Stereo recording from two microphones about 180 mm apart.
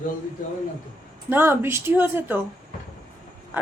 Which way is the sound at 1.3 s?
15° right (ahead or behind).